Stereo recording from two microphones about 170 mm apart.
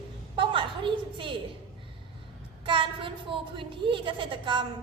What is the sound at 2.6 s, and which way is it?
A woman's voice, 30° right (ahead or behind).